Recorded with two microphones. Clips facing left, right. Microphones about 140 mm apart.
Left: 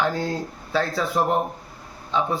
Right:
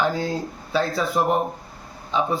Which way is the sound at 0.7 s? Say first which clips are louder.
Right 1 dB; 15° right (ahead or behind).